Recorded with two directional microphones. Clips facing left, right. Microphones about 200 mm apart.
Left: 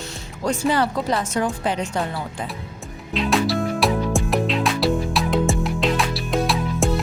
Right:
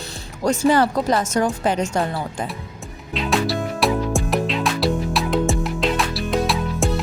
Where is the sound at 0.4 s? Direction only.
45° right (ahead or behind).